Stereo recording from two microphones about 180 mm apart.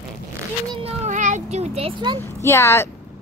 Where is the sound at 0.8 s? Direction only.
40° right (ahead or behind).